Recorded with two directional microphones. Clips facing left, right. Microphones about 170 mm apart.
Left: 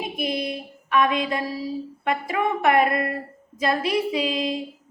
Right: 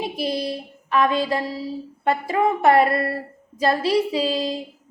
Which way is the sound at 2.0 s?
30° right (ahead or behind).